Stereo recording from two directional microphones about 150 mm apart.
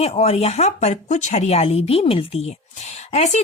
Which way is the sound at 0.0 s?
45° left (ahead or behind).